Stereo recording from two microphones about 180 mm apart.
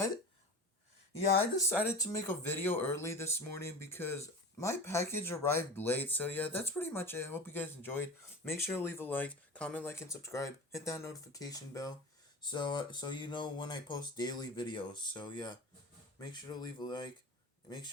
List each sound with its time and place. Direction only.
1.5 s speech: 15° left (ahead or behind)